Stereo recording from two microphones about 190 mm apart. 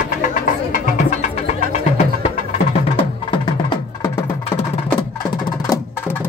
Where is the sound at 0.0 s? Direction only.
45° left (ahead or behind); by 4.1 s 25° left (ahead or behind).